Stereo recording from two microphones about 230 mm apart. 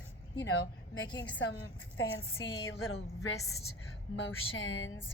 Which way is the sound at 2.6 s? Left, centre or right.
Left.